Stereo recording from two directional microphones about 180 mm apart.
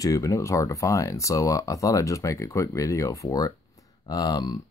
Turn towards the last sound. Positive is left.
turn(degrees=20)  # may be behind; listen again after turning